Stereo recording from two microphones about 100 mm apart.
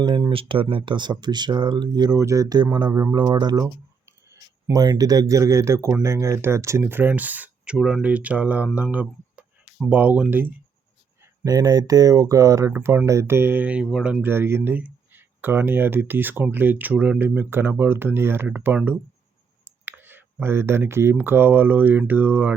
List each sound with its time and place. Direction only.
0.0 s speech: 50° right (ahead or behind)
2.1 s speech: 35° right (ahead or behind)
4.3 s speech: 35° right (ahead or behind); by 10.5 s 20° right (ahead or behind)
11.4 s speech: 40° right (ahead or behind); by 14.3 s 10° right (ahead or behind)
14.3 s speech: 25° right (ahead or behind)